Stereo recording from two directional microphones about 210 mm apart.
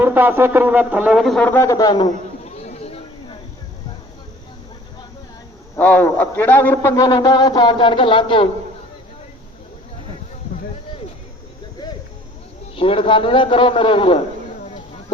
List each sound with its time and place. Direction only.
0.0 s speech: 10° right (ahead or behind); by 2.1 s 20° left (ahead or behind)
2.4 s a sound: 30° left (ahead or behind)
5.7 s a man's voice: 10° left (ahead or behind); by 8.4 s 25° left (ahead or behind)
12.7 s a man's voice: 25° left (ahead or behind)